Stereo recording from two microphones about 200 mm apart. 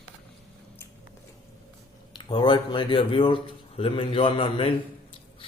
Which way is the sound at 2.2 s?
25° left (ahead or behind).